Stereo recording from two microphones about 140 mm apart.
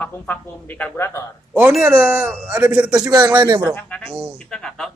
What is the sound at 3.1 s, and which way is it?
Speech, 25° right (ahead or behind).